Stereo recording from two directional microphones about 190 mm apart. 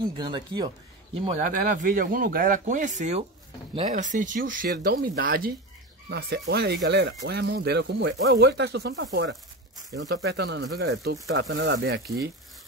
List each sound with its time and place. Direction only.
0.0 s speech: 25° right (ahead or behind)
1.7 s speech: 45° right (ahead or behind); by 12.0 s 65° right (ahead or behind)